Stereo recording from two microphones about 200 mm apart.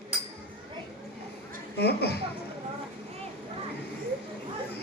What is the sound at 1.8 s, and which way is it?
Speech, 55° left (ahead or behind).